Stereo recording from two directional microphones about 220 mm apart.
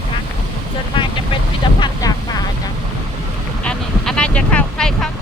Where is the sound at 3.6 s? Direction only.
5° left (ahead or behind).